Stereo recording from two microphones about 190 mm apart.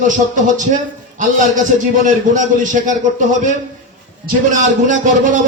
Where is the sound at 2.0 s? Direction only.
40° right (ahead or behind).